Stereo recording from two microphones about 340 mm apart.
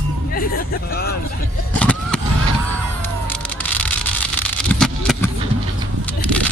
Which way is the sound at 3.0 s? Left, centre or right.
Centre.